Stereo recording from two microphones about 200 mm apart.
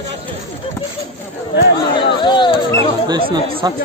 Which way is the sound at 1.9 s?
25° left (ahead or behind).